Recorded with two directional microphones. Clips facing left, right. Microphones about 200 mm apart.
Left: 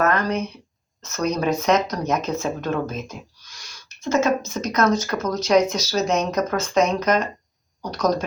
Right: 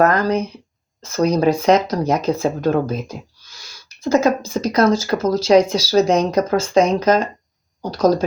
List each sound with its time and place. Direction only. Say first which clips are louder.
0.0 s speech: right 5 dB; 35° right (ahead or behind)